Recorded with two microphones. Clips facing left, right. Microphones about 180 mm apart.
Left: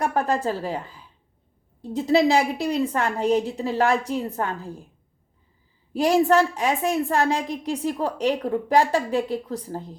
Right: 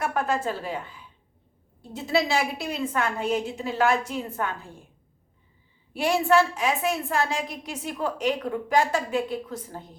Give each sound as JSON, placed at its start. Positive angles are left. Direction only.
{"t": 0.0, "sound": "a woman's voice", "side_deg": 35}
{"t": 2.0, "sound": "a woman's voice", "side_deg": 35}
{"t": 6.0, "sound": "a woman's voice", "side_deg": 40}